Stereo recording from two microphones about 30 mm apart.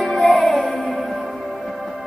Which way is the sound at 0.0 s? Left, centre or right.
Centre.